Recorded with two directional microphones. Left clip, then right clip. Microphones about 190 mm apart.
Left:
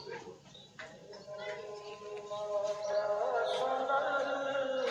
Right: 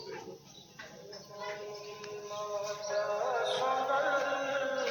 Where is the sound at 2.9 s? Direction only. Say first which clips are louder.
Right 2 dB; 40° right (ahead or behind).